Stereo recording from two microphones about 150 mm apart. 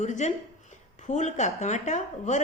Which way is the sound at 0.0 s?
55° left (ahead or behind).